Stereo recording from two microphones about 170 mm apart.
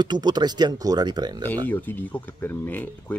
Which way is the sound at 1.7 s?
10° left (ahead or behind).